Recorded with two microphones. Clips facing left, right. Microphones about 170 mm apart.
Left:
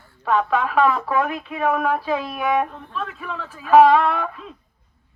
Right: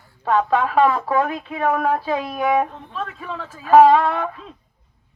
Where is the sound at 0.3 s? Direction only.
35° right (ahead or behind).